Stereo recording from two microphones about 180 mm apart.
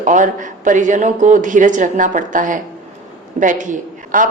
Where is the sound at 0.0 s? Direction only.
45° right (ahead or behind).